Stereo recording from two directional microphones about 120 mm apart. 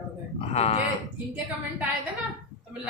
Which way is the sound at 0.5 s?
60° left (ahead or behind).